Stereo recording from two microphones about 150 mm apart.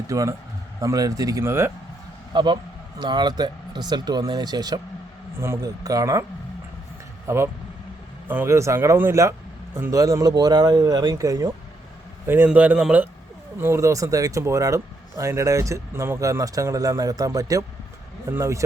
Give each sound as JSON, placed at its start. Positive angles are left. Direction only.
{"t": 0.1, "sound": "speech", "side_deg": -20}
{"t": 2.3, "sound": "a man's voice", "side_deg": -30}
{"t": 7.3, "sound": "a man's voice", "side_deg": -15}